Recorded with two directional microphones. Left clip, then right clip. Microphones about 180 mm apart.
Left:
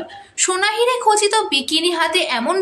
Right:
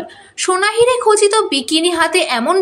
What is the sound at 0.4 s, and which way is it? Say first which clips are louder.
A woman's voice: right 4 dB; 20° right (ahead or behind).